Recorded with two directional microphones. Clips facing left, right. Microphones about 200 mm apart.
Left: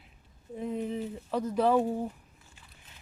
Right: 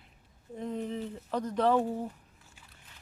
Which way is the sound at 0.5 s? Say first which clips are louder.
Left 2 dB; 5° left (ahead or behind).